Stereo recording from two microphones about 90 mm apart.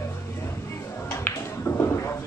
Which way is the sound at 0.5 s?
30° left (ahead or behind).